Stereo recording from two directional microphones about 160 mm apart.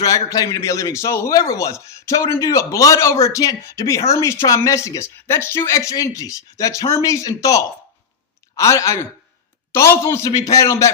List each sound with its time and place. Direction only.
0.0 s a man's voice: 20° left (ahead or behind)